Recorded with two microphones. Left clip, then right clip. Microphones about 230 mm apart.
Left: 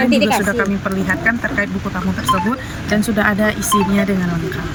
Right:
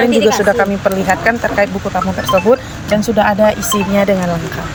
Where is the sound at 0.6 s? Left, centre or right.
Centre.